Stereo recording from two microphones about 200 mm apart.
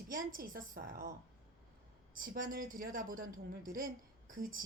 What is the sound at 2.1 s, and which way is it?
A woman's voice, 45° right (ahead or behind).